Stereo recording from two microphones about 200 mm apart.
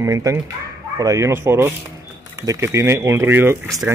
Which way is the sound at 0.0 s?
15° right (ahead or behind).